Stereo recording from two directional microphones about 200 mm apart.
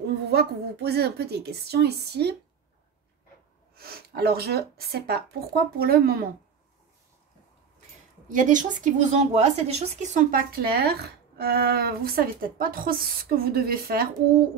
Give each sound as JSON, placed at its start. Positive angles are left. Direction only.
{"t": 0.0, "sound": "a woman's voice", "side_deg": -55}
{"t": 3.7, "sound": "a woman's voice", "side_deg": -50}
{"t": 8.3, "sound": "a woman's voice", "side_deg": -40}